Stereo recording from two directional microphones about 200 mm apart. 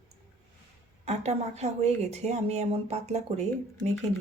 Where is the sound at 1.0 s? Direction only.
35° right (ahead or behind).